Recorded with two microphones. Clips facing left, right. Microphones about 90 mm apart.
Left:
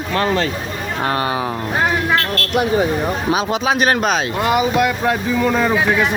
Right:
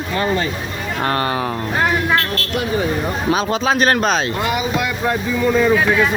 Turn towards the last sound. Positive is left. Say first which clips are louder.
# left 3 dB
turn(degrees=65)  # may be behind; listen again after turning